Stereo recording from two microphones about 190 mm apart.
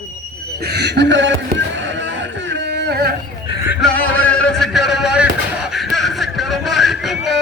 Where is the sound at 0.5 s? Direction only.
60° right (ahead or behind).